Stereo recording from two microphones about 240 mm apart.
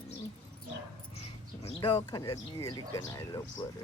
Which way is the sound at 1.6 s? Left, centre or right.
Left.